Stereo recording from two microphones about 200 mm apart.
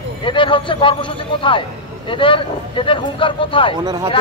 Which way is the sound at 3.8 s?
20° right (ahead or behind).